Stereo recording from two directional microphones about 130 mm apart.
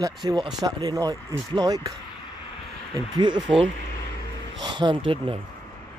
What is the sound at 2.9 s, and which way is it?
Speech, 35° right (ahead or behind).